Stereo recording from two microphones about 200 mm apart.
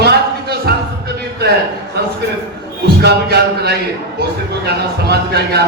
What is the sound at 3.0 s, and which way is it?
Music, 55° right (ahead or behind).